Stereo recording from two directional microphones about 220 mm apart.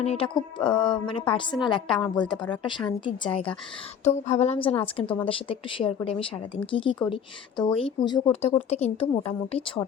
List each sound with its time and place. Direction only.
0.0 s a woman's voice: 25° left (ahead or behind)